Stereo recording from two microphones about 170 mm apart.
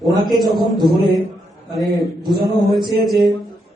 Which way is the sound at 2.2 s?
25° right (ahead or behind).